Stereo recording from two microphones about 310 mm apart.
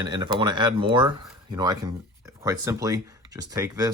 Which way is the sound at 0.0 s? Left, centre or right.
Centre.